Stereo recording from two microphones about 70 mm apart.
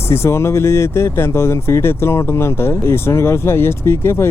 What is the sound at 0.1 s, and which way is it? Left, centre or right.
Speech, left.